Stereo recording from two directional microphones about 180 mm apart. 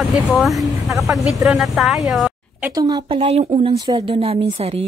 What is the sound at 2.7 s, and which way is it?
Speech, 25° right (ahead or behind).